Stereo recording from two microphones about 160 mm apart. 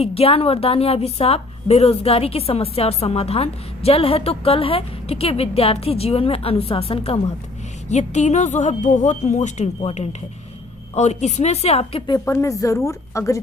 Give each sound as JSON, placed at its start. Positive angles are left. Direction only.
{"t": 0.0, "sound": "a woman's voice", "side_deg": 40}
{"t": 12.1, "sound": "a woman's voice", "side_deg": 15}